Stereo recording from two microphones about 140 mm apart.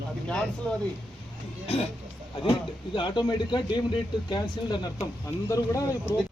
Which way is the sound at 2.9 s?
35° left (ahead or behind).